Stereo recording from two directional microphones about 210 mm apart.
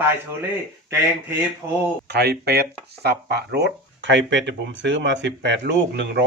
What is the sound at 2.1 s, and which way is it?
Speech, 50° right (ahead or behind).